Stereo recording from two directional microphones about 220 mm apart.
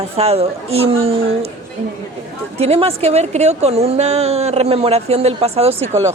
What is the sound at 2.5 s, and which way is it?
A woman's voice, 25° right (ahead or behind).